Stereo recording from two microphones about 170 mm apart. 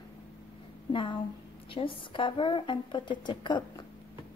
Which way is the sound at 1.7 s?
30° left (ahead or behind).